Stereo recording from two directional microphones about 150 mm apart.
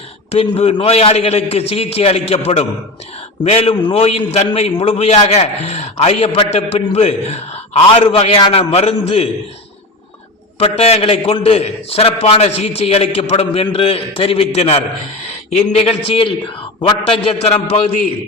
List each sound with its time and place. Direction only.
0.3 s a man's voice: 40° left (ahead or behind)
10.6 s a man's voice: 40° left (ahead or behind)